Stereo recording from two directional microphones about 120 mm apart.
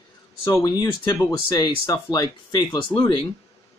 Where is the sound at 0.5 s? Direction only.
30° left (ahead or behind).